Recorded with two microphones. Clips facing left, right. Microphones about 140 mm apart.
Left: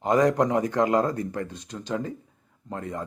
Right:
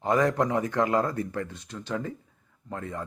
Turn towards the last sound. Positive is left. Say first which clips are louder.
# left 2 dB
turn(degrees=20)  # may be behind; listen again after turning